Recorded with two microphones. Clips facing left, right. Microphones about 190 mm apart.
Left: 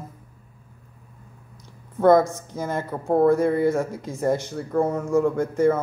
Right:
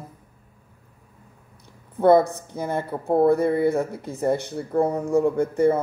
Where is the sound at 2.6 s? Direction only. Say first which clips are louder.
Right 1 dB; 10° right (ahead or behind).